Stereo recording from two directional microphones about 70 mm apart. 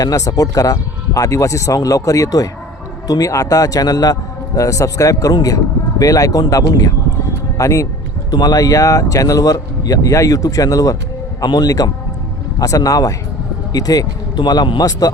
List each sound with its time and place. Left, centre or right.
0.0 s speech: left
7.6 s a man's voice: left
8.3 s speech: left
11.4 s speech: left